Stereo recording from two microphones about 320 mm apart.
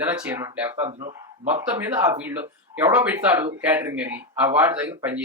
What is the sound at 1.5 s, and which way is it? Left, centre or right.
Speech, centre.